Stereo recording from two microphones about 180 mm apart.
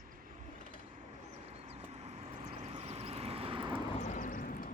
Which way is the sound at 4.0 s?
45° left (ahead or behind).